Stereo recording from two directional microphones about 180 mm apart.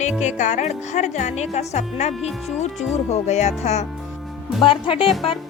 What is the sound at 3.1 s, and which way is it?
A woman's voice, 40° left (ahead or behind).